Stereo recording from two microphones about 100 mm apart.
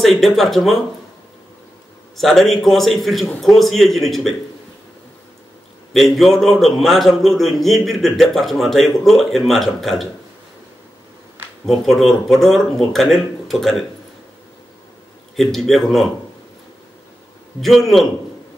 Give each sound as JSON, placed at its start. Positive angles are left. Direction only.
{"t": 0.0, "sound": "a man's voice", "side_deg": 0}
{"t": 2.1, "sound": "a man's voice", "side_deg": 0}
{"t": 5.9, "sound": "a man's voice", "side_deg": 0}
{"t": 11.6, "sound": "a man's voice", "side_deg": 0}
{"t": 15.3, "sound": "a man's voice", "side_deg": 0}
{"t": 17.6, "sound": "a man's voice", "side_deg": 0}